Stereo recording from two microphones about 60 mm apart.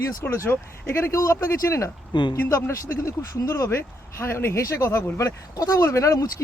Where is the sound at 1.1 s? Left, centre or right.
Left.